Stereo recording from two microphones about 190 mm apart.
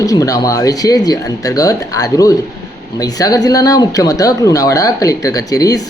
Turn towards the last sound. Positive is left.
turn(degrees=20)  # may be behind; listen again after turning